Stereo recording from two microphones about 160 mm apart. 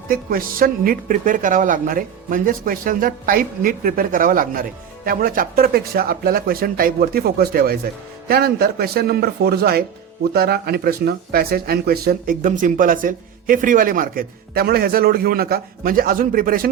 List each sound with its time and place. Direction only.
0.1 s a woman's voice: 65° right (ahead or behind)